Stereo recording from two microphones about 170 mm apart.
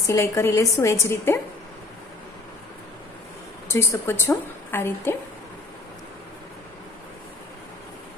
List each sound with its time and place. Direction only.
0.1 s a woman's voice: 15° left (ahead or behind)
3.7 s a woman's voice: 15° left (ahead or behind)